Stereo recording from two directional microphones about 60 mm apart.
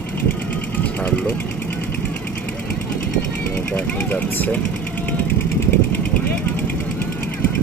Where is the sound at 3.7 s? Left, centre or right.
Left.